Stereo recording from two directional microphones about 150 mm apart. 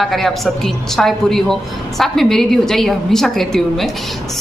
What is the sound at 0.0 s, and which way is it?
Speech, centre (ahead or behind).